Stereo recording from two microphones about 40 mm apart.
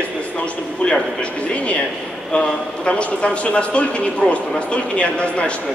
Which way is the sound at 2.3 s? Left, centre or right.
Left.